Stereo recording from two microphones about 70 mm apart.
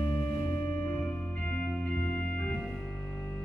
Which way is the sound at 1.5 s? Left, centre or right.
Left.